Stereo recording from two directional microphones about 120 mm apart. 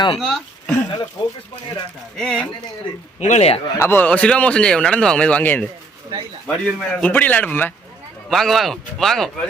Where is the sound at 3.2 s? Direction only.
65° left (ahead or behind).